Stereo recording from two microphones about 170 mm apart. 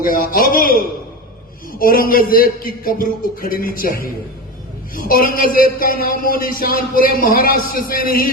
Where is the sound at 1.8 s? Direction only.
60° left (ahead or behind).